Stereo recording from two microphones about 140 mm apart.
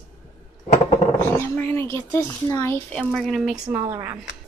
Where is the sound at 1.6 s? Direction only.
15° left (ahead or behind).